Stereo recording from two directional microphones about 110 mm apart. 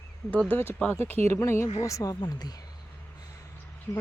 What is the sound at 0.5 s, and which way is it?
Speech, 20° left (ahead or behind).